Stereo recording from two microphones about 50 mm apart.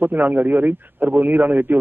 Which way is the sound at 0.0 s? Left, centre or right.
Right.